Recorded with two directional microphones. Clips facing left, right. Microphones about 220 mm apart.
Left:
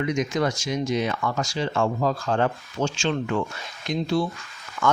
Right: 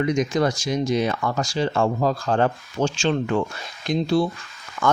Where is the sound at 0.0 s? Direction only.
35° right (ahead or behind).